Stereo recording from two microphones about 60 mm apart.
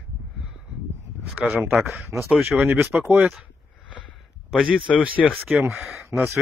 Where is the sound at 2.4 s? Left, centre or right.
Right.